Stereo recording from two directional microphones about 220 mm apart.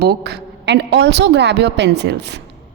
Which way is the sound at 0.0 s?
45° right (ahead or behind).